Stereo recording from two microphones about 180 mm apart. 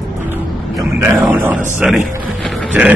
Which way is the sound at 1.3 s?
10° right (ahead or behind).